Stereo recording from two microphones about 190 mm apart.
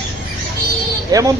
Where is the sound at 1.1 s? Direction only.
20° right (ahead or behind).